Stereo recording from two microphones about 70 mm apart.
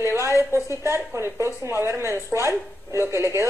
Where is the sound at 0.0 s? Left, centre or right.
Right.